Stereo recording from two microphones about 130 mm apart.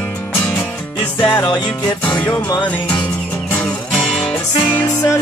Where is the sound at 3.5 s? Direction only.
5° left (ahead or behind).